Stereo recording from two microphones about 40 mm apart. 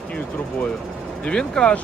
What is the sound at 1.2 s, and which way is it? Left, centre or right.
Speech, left.